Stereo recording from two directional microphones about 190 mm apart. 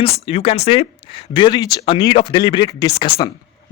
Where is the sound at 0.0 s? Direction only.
30° left (ahead or behind).